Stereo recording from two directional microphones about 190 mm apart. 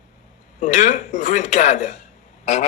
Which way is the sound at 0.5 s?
40° left (ahead or behind).